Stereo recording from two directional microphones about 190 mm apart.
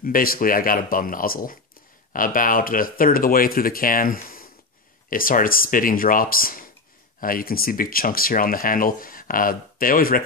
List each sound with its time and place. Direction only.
0.0 s speech: 50° left (ahead or behind)